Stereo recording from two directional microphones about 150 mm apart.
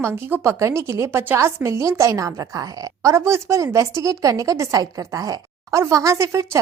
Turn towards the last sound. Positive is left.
turn(degrees=-20)  # may be behind; listen again after turning